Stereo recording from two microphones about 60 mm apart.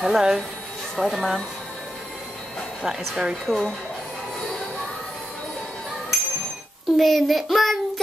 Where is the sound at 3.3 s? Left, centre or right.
Centre.